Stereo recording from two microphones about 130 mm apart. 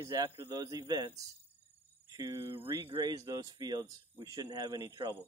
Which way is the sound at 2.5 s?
20° right (ahead or behind).